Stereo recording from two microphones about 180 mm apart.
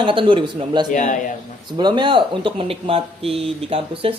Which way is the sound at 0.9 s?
45° left (ahead or behind).